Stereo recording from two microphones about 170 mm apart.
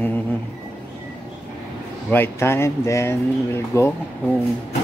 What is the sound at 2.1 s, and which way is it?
Speech, 15° left (ahead or behind).